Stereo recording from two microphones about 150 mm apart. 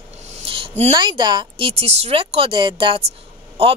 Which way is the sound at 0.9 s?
30° right (ahead or behind).